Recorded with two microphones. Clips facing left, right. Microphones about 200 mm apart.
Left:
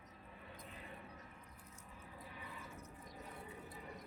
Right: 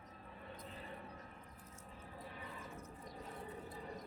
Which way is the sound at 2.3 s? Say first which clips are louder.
Right 1 dB; 35° right (ahead or behind).